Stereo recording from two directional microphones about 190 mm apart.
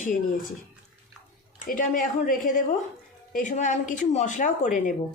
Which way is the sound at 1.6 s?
45° left (ahead or behind).